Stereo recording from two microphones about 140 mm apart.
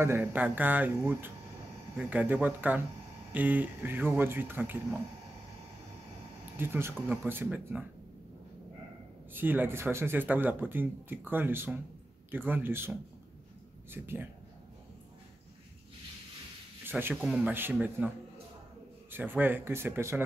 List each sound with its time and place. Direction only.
0.0 s speech: 15° right (ahead or behind)
6.5 s speech: 15° right (ahead or behind)
9.3 s speech: 15° right (ahead or behind)
13.9 s speech: 15° right (ahead or behind)
16.8 s speech: 10° right (ahead or behind)